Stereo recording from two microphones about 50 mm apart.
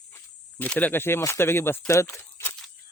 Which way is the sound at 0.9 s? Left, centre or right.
Left.